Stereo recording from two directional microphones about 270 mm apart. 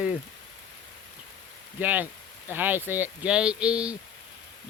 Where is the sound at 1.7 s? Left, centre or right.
Centre.